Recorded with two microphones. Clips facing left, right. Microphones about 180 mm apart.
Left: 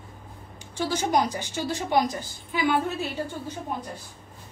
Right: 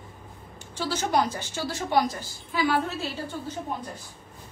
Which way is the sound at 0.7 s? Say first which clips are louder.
Left 1 dB; 15° left (ahead or behind).